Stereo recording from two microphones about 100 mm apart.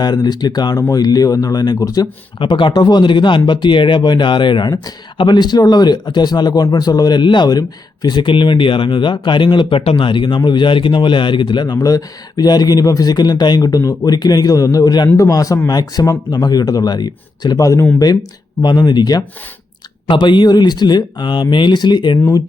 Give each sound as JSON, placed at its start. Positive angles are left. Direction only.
{"t": 0.0, "sound": "speech", "side_deg": 45}
{"t": 2.4, "sound": "speech", "side_deg": 55}
{"t": 13.6, "sound": "speech", "side_deg": 35}
{"t": 20.1, "sound": "speech", "side_deg": 55}